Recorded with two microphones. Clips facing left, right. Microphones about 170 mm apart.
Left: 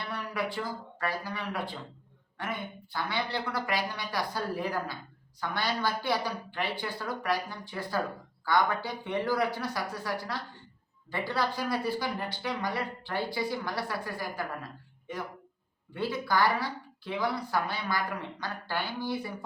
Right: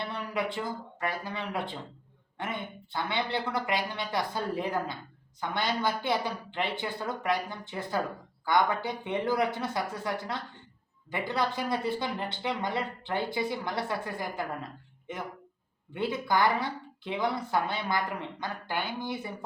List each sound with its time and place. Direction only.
0.0 s speech: 20° right (ahead or behind)